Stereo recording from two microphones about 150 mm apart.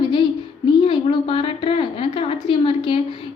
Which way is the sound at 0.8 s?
35° left (ahead or behind).